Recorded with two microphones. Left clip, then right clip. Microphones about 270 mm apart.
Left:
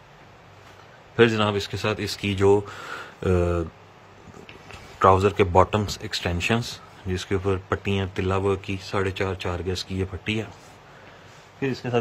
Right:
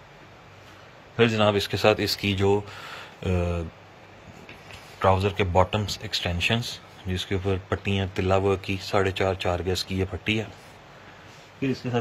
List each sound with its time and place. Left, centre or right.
1.1 s speech: centre
5.0 s speech: left
11.9 s speech: centre